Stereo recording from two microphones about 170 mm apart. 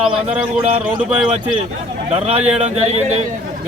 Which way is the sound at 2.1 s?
40° right (ahead or behind).